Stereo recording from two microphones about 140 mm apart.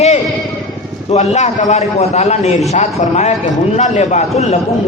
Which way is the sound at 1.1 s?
50° left (ahead or behind).